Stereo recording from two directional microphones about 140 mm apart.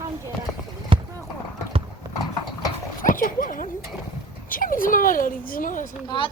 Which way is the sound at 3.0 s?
75° left (ahead or behind).